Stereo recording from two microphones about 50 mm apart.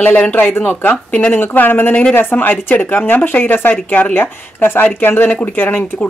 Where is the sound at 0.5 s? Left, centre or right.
Left.